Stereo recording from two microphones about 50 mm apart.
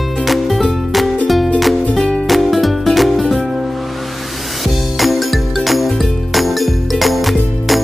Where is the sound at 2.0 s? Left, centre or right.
Centre.